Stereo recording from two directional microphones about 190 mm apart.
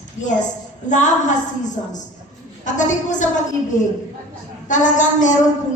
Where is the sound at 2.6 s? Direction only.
40° left (ahead or behind).